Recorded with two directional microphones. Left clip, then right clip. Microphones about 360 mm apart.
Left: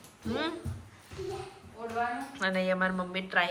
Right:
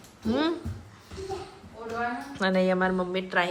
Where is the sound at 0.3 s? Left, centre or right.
Centre.